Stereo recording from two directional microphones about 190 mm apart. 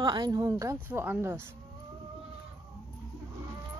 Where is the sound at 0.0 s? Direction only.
20° right (ahead or behind).